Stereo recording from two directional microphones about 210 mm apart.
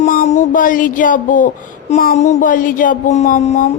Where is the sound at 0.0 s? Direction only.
35° left (ahead or behind).